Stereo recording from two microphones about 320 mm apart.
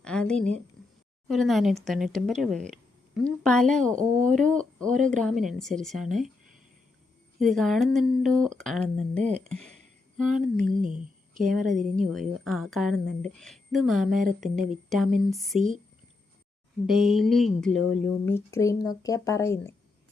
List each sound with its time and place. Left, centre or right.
0.0 s a woman's voice: centre
7.3 s speech: centre
10.8 s speech: right
11.3 s speech: centre
15.5 s speech: right
16.8 s speech: centre